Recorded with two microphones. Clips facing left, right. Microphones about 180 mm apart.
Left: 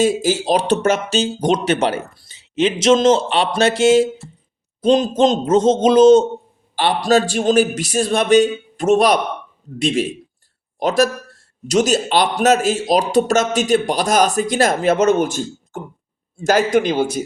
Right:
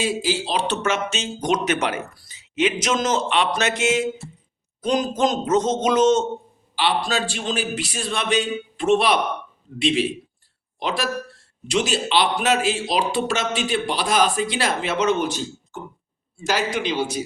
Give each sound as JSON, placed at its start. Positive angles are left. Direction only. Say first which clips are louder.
{"t": 0.0, "sound": "a man's voice", "louder": "left 7 dB", "side_deg": 45}
{"t": 6.7, "sound": "a man's voice", "louder": "left 7 dB", "side_deg": 45}